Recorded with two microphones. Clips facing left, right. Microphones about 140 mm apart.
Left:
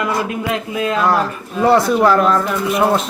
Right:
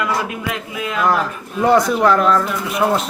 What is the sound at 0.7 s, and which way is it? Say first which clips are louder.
Speech: left 4 dB; 35° left (ahead or behind).